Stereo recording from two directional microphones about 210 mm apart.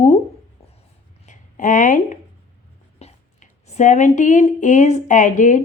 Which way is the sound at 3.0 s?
30° left (ahead or behind).